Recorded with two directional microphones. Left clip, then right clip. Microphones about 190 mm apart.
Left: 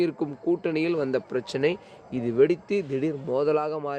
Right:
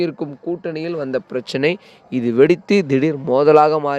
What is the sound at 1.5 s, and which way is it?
A man's voice, 50° right (ahead or behind).